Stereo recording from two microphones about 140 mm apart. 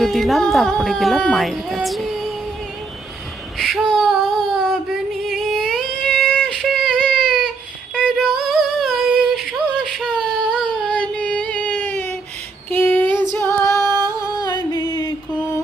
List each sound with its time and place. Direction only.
0.0 s speech: centre (ahead or behind)
3.9 s a sound: centre (ahead or behind)
7.9 s female singing: 5° left (ahead or behind)
13.6 s music: 20° left (ahead or behind)